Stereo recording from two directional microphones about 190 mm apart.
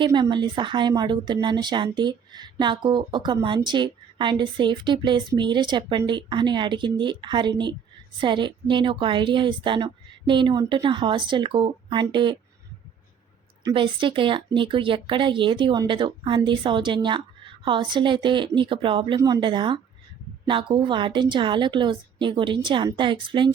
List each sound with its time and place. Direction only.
0.0 s speech: 25° right (ahead or behind)
13.7 s speech: 25° right (ahead or behind)